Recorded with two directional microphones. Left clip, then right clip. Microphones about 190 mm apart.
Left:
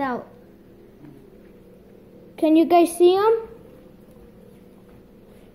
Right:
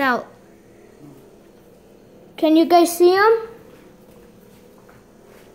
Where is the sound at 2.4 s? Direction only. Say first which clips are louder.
Right 2 dB; 5° right (ahead or behind).